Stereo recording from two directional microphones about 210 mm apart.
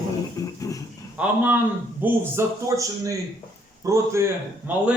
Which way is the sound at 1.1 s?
10° right (ahead or behind).